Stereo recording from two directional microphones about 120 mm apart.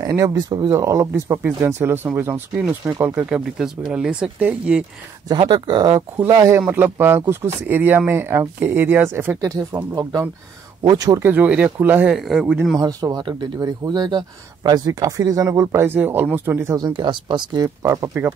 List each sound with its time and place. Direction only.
0.0 s speech: 25° right (ahead or behind); by 4.8 s 10° right (ahead or behind)
5.5 s speech: 35° right (ahead or behind)
6.1 s speech: 20° right (ahead or behind)
9.4 s speech: 30° right (ahead or behind)
11.1 s speech: 15° right (ahead or behind)
12.2 s speech: 5° right (ahead or behind)
12.7 s speech: 35° right (ahead or behind); by 16.7 s 20° right (ahead or behind)
16.7 s speech: 40° right (ahead or behind)
17.8 s speech: 20° right (ahead or behind)